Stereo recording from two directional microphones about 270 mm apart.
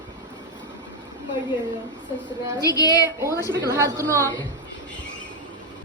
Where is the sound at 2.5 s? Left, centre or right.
Centre.